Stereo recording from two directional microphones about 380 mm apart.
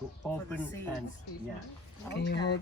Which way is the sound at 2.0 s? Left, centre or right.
Left.